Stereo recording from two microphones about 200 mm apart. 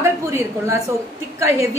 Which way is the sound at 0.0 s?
15° right (ahead or behind).